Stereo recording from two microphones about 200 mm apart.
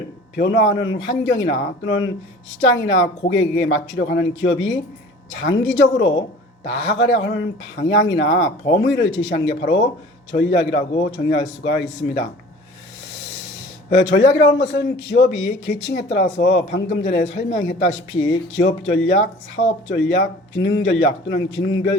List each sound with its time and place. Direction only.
0.3 s a man's voice: 55° left (ahead or behind)
6.7 s a man's voice: 55° left (ahead or behind)
13.9 s a man's voice: 65° left (ahead or behind)